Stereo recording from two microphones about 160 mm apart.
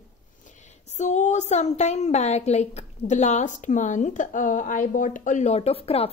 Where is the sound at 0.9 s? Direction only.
45° left (ahead or behind).